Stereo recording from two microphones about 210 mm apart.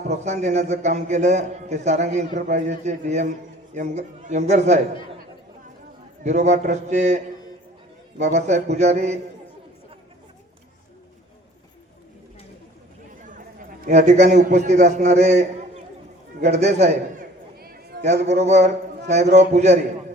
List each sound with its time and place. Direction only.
0.3 s a man's voice: 35° right (ahead or behind)
6.2 s a man's voice: 35° right (ahead or behind)
8.2 s a man's voice: 35° right (ahead or behind)
13.8 s a man's voice: 35° right (ahead or behind)
17.9 s a sound: 50° right (ahead or behind)
18.3 s a man's voice: 30° right (ahead or behind)